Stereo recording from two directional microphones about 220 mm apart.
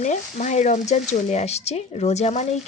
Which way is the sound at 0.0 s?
35° left (ahead or behind).